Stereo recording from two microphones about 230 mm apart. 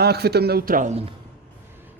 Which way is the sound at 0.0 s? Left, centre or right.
Right.